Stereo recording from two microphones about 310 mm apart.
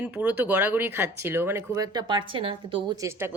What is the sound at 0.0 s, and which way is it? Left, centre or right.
A woman's voice, centre.